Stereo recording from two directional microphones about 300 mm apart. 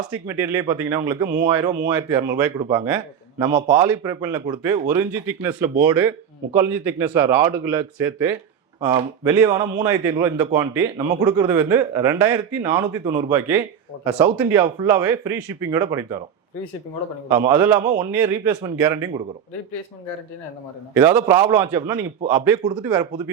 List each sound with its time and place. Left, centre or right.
0.3 s a man's voice: centre
1.3 s a man's voice: right
17.2 s a man's voice: centre
20.9 s a man's voice: centre